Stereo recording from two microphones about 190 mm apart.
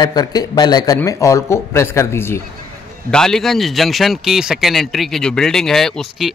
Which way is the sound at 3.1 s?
5° left (ahead or behind).